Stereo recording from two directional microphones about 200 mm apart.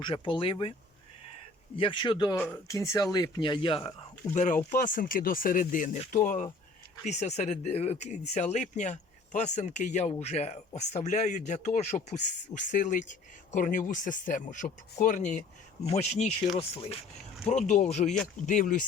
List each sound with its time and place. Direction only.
0.0 s speech: 25° left (ahead or behind)
1.7 s speech: 25° left (ahead or behind)
2.4 s speech: 10° left (ahead or behind)
4.4 s speech: 40° left (ahead or behind)